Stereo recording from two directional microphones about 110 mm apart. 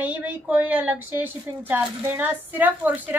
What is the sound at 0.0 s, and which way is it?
A woman's voice, 15° right (ahead or behind).